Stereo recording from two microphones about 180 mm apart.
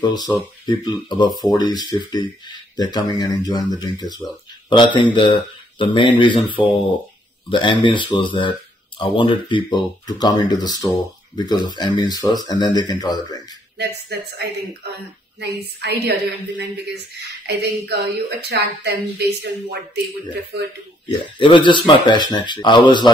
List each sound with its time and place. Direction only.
0.0 s speech: 25° left (ahead or behind)
15.4 s a woman's voice: 65° right (ahead or behind)
21.2 s speech: 30° left (ahead or behind)